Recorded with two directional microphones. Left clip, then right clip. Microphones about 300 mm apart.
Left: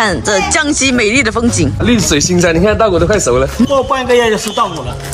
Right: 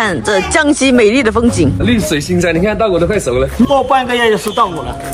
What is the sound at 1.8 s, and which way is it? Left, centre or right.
Speech, centre.